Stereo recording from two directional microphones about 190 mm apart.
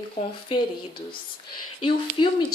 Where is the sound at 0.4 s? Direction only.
25° left (ahead or behind).